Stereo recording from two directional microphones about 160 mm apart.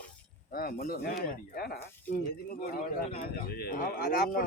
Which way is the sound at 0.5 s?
65° left (ahead or behind).